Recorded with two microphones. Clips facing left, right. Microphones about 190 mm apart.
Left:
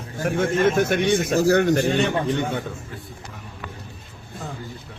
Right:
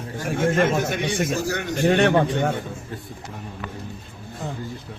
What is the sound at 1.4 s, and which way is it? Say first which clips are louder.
Speech: left 9 dB; 45° left (ahead or behind).